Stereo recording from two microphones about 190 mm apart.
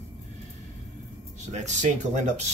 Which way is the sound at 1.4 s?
40° right (ahead or behind).